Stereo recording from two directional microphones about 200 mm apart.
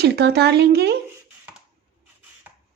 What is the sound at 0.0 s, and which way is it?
Speech, 55° right (ahead or behind).